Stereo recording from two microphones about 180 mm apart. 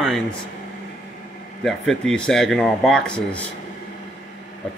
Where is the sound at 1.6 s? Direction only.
Centre (ahead or behind).